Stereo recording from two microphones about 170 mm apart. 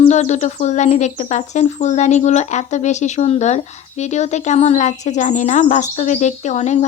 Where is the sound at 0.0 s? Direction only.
40° left (ahead or behind).